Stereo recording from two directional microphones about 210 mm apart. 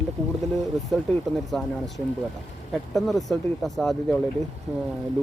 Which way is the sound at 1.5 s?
5° left (ahead or behind).